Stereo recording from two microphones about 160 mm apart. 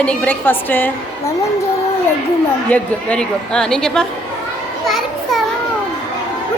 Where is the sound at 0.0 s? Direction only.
10° left (ahead or behind).